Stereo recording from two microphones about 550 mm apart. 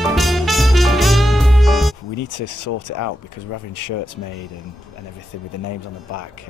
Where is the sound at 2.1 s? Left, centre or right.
Left.